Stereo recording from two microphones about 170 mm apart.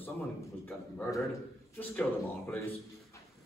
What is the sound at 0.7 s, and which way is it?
A man's voice, 15° left (ahead or behind).